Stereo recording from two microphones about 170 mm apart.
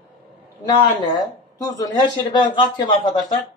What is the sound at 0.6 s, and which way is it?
Speech, 25° left (ahead or behind).